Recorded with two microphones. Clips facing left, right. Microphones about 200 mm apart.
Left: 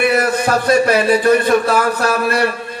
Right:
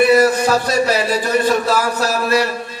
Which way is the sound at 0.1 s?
55° left (ahead or behind).